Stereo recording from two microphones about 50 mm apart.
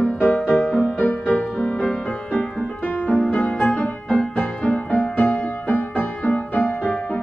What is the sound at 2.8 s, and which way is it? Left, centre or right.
Music, left.